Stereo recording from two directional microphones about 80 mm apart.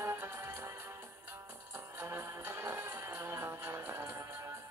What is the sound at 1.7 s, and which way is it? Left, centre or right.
Music, right.